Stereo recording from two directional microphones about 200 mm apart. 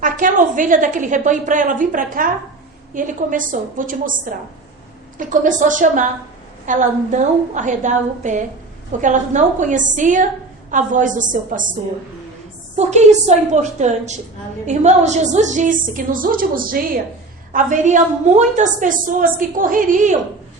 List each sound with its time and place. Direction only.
0.0 s a woman's voice: 40° right (ahead or behind)
5.1 s a woman's voice: 40° right (ahead or behind)
12.7 s a woman's voice: 35° right (ahead or behind)